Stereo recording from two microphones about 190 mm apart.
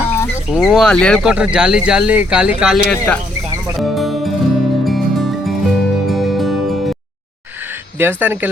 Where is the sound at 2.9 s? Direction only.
5° left (ahead or behind).